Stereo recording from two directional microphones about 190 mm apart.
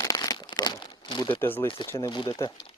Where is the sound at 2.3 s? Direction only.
15° left (ahead or behind).